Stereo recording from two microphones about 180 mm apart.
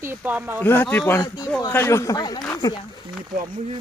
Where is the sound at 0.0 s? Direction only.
10° right (ahead or behind).